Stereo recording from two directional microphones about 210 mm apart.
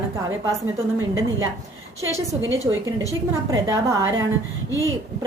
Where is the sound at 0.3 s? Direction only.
15° right (ahead or behind).